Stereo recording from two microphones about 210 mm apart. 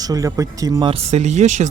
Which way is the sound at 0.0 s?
15° right (ahead or behind).